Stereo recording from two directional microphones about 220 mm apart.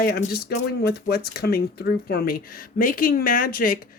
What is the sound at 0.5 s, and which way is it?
Speech, 45° left (ahead or behind).